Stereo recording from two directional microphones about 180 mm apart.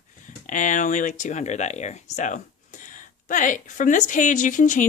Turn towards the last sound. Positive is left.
turn(degrees=45)  # may be behind; listen again after turning